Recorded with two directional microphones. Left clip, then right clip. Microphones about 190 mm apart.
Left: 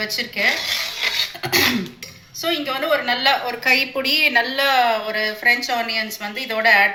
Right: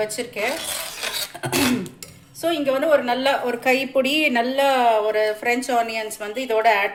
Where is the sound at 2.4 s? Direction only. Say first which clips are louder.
Right 1 dB; 65° right (ahead or behind).